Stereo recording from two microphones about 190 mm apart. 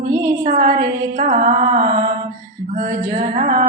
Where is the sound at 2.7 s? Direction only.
40° right (ahead or behind).